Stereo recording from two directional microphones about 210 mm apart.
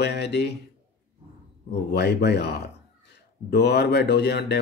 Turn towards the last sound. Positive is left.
turn(degrees=50)  # may be behind; listen again after turning